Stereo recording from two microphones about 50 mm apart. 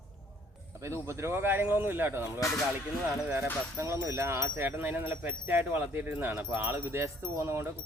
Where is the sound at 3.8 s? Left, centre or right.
Right.